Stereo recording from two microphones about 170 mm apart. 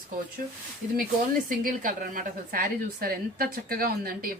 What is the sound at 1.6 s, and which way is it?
A woman's voice, 55° right (ahead or behind).